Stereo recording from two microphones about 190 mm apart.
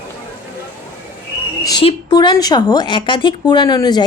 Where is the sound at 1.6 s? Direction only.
25° left (ahead or behind).